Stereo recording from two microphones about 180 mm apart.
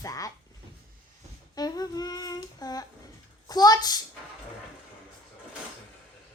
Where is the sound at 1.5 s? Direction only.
20° left (ahead or behind).